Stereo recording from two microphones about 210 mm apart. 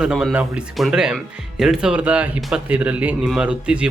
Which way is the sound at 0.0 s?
Centre (ahead or behind).